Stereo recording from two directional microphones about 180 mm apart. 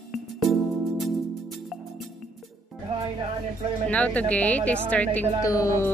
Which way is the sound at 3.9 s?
5° left (ahead or behind).